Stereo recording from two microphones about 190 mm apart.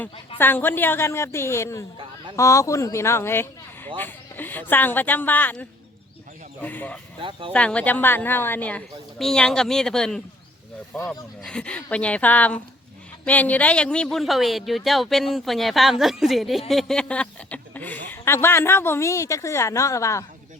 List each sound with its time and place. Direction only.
0.3 s speech: 10° left (ahead or behind)
7.2 s speech: 25° right (ahead or behind)
7.5 s speech: 5° left (ahead or behind)